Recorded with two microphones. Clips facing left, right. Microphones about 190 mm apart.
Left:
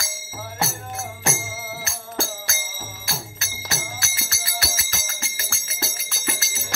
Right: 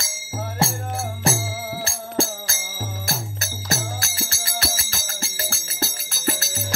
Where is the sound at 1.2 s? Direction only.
35° right (ahead or behind).